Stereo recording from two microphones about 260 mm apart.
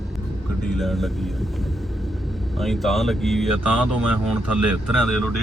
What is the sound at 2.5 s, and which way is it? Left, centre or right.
Speech, centre.